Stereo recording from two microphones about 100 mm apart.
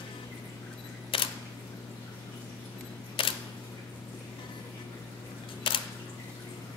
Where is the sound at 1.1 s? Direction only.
60° left (ahead or behind).